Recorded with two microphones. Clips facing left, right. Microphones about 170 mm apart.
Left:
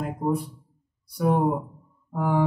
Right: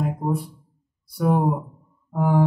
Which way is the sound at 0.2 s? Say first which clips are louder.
Even; centre (ahead or behind).